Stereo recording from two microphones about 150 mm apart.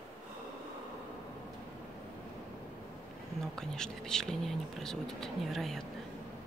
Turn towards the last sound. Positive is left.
turn(degrees=0)  # may be behind; listen again after turning